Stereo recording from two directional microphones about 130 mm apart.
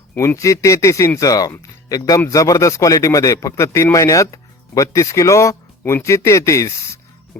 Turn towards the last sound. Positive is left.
turn(degrees=15)  # may be behind; listen again after turning